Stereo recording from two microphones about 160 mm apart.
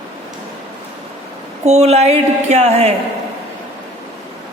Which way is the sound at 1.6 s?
45° right (ahead or behind).